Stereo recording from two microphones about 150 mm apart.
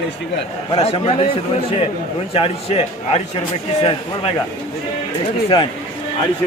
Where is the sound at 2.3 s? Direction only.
40° left (ahead or behind).